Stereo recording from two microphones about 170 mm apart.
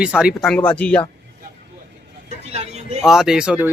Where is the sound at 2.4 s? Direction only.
40° right (ahead or behind).